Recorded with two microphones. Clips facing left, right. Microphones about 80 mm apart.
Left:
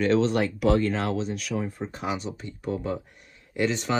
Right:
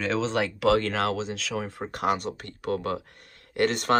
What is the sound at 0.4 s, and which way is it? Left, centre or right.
Speech, right.